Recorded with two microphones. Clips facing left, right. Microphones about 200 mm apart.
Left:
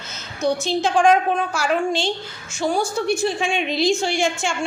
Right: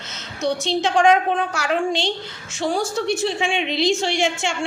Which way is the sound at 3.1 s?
25° right (ahead or behind).